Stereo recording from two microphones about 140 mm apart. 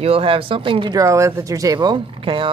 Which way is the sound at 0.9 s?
20° right (ahead or behind).